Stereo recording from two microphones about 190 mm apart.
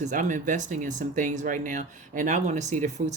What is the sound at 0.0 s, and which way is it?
Speech, 40° right (ahead or behind).